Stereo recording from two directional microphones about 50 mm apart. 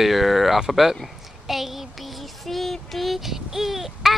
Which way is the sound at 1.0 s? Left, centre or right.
Centre.